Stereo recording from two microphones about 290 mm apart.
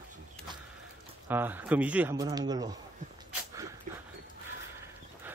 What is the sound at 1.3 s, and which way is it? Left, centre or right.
A man's voice, centre.